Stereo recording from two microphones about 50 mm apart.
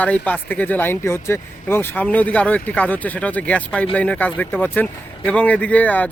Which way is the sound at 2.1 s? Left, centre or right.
Left.